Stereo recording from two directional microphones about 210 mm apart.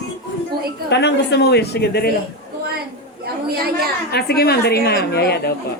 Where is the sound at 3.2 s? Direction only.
50° right (ahead or behind).